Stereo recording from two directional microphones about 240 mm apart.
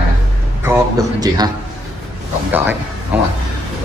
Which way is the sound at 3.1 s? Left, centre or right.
Centre.